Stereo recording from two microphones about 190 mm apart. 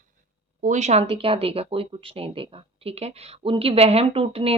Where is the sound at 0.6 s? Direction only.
40° right (ahead or behind).